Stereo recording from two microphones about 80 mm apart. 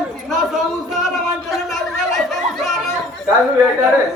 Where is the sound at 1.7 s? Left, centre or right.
Centre.